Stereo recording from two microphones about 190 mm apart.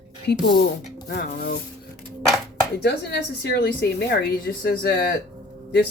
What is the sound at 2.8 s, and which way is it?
Speech, 60° left (ahead or behind).